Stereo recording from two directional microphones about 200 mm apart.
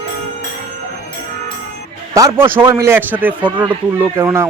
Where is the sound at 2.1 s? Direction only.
15° right (ahead or behind).